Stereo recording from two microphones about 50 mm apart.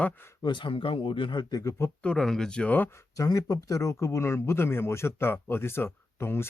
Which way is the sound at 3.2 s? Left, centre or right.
Left.